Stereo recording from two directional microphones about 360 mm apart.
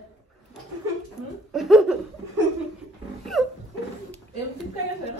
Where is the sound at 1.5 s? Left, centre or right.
Centre.